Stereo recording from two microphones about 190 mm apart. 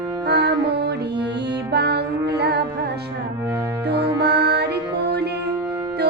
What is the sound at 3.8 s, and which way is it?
Music, 60° right (ahead or behind).